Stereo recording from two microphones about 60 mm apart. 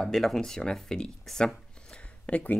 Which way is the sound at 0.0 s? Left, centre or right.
Centre.